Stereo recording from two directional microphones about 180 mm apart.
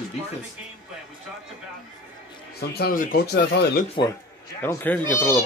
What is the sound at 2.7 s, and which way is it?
Speech, 55° left (ahead or behind).